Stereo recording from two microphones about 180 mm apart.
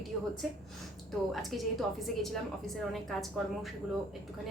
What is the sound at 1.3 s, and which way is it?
A woman's voice, centre (ahead or behind).